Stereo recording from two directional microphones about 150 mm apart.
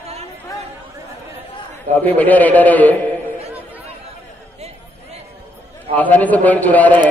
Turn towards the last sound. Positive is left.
turn(degrees=10)  # may be behind; listen again after turning